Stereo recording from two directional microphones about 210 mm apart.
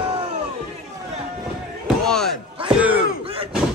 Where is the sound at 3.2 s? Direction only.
25° right (ahead or behind).